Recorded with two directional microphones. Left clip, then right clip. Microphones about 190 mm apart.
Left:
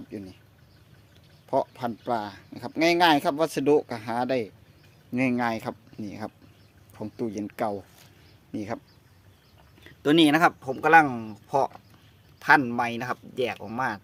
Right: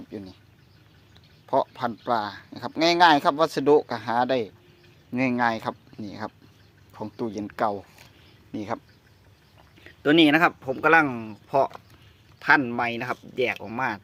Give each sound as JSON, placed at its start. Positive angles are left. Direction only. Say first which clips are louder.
{"t": 1.5, "sound": "speech", "louder": "right 2 dB", "side_deg": 15}
{"t": 9.8, "sound": "speech", "louder": "right 2 dB", "side_deg": 20}